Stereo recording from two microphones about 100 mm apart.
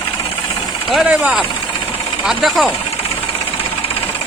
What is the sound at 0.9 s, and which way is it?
Speech, 10° right (ahead or behind).